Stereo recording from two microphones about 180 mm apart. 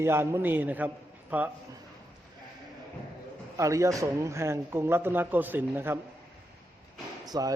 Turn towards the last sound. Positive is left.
turn(degrees=-20)  # may be behind; listen again after turning